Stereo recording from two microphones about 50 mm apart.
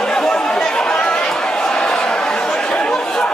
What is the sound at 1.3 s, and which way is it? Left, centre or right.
Chatter, centre.